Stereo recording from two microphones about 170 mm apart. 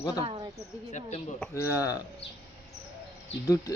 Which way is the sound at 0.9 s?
40° left (ahead or behind).